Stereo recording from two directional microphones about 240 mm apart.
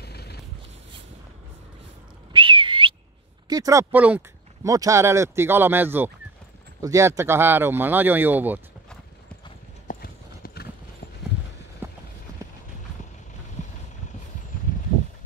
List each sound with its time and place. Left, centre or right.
0.0 s a sound: left
2.3 s whistle: right
3.4 s speech: centre
9.9 s clip-clop: left
11.8 s clip-clop: centre